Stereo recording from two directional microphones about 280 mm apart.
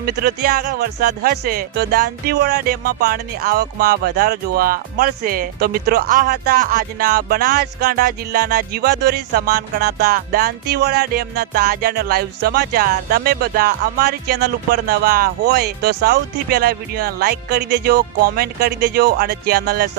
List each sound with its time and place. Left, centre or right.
0.0 s speech: right